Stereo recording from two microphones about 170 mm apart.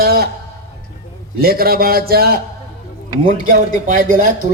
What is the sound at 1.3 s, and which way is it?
A man's voice, 60° right (ahead or behind).